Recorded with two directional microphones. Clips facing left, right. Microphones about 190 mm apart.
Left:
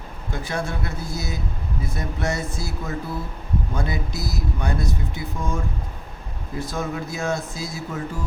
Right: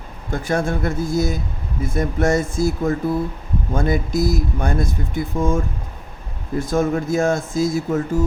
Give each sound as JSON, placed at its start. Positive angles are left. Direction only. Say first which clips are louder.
{"t": 0.3, "sound": "speech", "louder": "right 7 dB", "side_deg": -50}
{"t": 6.6, "sound": "speech", "louder": "right 8 dB", "side_deg": -50}